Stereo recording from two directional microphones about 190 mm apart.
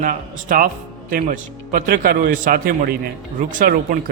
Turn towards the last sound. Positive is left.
turn(degrees=-45)  # may be behind; listen again after turning